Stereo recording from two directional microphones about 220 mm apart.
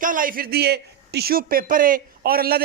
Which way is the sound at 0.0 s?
40° right (ahead or behind).